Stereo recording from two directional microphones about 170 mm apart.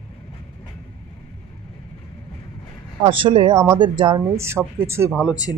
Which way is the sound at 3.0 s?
35° right (ahead or behind).